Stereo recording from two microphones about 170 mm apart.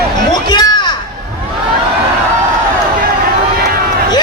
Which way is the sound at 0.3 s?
25° left (ahead or behind).